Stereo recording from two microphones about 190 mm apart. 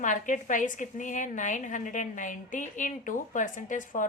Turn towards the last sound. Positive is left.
turn(degrees=45)  # may be behind; listen again after turning